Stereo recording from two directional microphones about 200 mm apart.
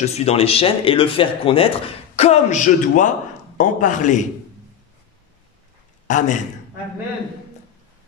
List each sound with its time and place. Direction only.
0.0 s a man's voice: 30° left (ahead or behind)
6.0 s a man's voice: 40° left (ahead or behind)